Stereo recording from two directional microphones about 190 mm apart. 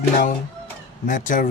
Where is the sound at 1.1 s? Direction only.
45° left (ahead or behind).